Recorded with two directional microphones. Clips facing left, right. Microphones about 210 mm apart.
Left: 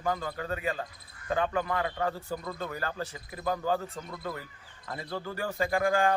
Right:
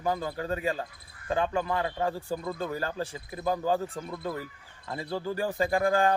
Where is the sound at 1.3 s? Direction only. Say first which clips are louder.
Right 1 dB; 30° right (ahead or behind).